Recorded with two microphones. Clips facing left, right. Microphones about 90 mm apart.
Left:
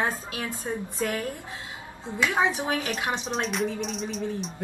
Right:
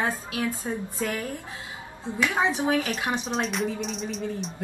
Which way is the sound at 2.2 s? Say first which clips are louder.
Even; 20° left (ahead or behind).